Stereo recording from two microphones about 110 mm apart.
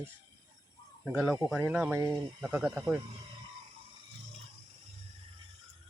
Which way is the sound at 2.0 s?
35° right (ahead or behind).